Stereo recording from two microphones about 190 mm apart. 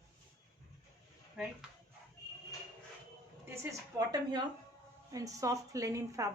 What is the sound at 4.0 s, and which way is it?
A woman's voice, 20° right (ahead or behind).